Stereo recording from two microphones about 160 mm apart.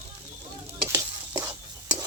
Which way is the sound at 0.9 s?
15° right (ahead or behind).